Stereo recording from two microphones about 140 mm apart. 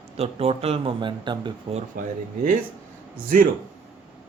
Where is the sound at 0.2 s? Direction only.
45° right (ahead or behind).